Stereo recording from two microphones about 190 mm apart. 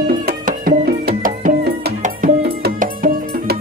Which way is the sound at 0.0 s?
45° right (ahead or behind).